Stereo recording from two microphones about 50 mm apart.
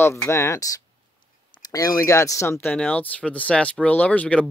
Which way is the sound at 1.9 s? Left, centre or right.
Left.